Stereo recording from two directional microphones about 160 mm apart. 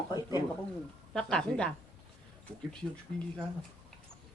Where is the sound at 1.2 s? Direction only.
5° left (ahead or behind).